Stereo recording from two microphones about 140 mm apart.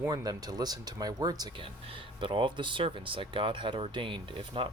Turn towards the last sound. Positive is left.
turn(degrees=-40)  # may be behind; listen again after turning